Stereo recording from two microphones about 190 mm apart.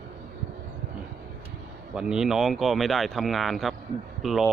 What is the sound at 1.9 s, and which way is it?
Speech, 5° right (ahead or behind).